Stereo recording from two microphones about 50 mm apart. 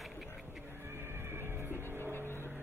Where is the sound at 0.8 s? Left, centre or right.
Right.